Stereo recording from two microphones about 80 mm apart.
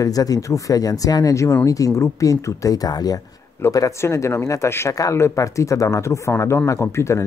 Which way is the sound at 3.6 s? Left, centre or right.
Left.